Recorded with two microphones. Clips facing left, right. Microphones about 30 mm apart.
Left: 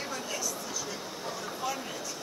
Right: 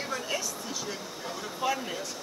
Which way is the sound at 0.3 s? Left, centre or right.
Right.